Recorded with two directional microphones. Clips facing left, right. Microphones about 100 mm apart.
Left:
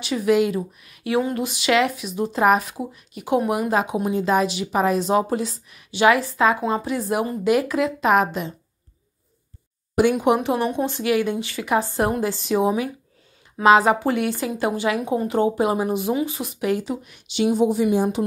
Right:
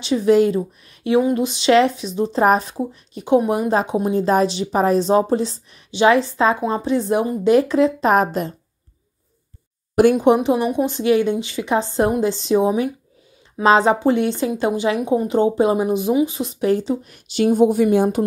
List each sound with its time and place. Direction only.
0.0 s speech: 25° right (ahead or behind)
10.1 s speech: 25° right (ahead or behind); by 18.2 s 50° right (ahead or behind)